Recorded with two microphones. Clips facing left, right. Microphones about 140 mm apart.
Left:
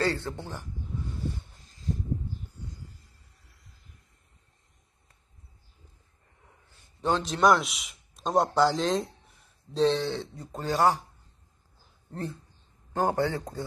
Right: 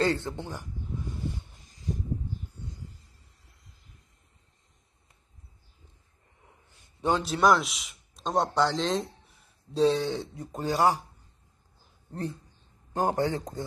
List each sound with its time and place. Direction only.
0.0 s speech: 20° right (ahead or behind)
1.3 s a sound: 15° right (ahead or behind)
7.0 s a man's voice: 10° right (ahead or behind)
9.8 s speech: 10° right (ahead or behind)
12.1 s speech: 15° right (ahead or behind)